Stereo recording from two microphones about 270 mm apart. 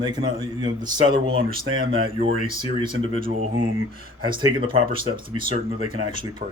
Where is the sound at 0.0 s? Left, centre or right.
Centre.